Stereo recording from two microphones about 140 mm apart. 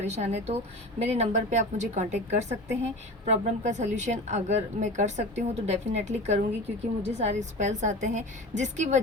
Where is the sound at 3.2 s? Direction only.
55° right (ahead or behind).